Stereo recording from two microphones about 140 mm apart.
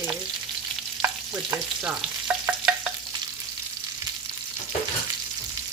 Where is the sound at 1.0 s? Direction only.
30° right (ahead or behind).